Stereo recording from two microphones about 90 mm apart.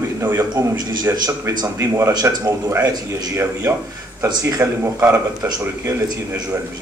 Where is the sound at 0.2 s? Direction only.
30° right (ahead or behind).